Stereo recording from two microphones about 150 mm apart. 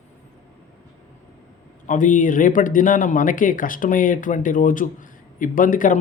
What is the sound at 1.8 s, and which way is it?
Speech, 60° left (ahead or behind).